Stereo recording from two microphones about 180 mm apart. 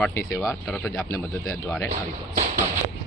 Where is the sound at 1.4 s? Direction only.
5° left (ahead or behind).